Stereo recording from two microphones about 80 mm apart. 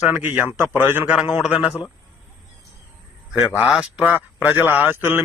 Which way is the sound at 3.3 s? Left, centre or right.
Centre.